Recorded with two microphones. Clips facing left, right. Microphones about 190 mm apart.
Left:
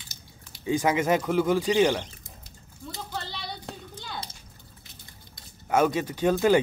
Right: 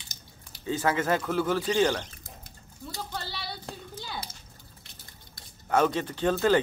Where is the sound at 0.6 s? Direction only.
15° left (ahead or behind).